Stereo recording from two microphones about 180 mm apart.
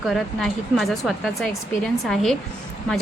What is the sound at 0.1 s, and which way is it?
A woman's voice, centre (ahead or behind).